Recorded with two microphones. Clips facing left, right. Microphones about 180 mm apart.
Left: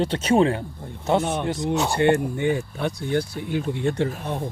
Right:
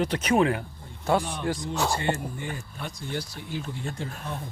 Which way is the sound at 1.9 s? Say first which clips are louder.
Left 9 dB; 65° left (ahead or behind).